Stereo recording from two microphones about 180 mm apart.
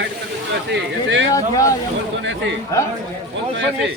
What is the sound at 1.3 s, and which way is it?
Speech, 20° left (ahead or behind).